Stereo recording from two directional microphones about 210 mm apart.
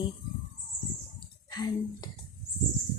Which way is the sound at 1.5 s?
20° left (ahead or behind).